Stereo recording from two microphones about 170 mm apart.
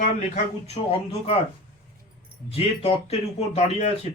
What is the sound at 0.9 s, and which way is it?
Speech, 35° left (ahead or behind).